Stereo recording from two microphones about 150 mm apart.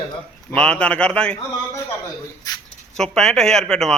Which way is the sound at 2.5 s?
25° left (ahead or behind).